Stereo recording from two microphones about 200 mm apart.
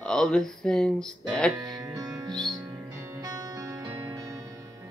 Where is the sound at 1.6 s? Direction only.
20° right (ahead or behind).